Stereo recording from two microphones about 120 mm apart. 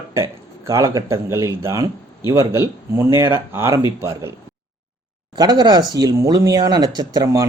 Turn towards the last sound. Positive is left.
turn(degrees=-25)  # may be behind; listen again after turning